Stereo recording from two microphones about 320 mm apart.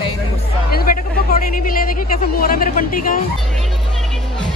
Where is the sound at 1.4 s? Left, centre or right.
Left.